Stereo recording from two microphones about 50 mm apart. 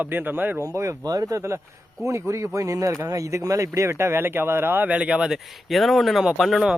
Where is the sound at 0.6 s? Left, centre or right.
Right.